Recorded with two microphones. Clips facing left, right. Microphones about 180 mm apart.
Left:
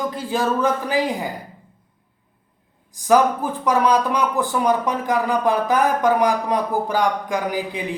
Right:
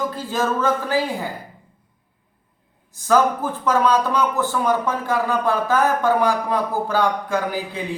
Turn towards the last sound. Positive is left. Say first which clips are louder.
# even
turn(degrees=15)  # may be behind; listen again after turning